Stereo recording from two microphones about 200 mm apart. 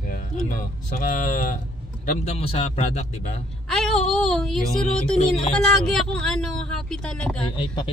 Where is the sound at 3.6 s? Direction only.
Centre (ahead or behind).